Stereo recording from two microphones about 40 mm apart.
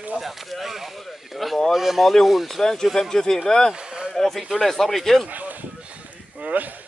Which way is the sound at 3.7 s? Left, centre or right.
Right.